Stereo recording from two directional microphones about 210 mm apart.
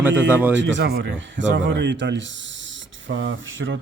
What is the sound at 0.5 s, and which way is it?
Speech, 60° right (ahead or behind).